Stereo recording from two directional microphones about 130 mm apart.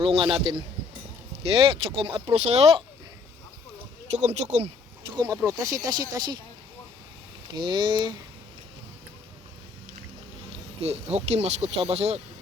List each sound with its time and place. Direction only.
0.0 s speech: 45° right (ahead or behind)
2.3 s speech: 55° right (ahead or behind)
4.1 s speech: 60° right (ahead or behind)
5.1 s speech: 30° right (ahead or behind)
7.4 s speech: 35° right (ahead or behind)
10.8 s speech: 55° right (ahead or behind)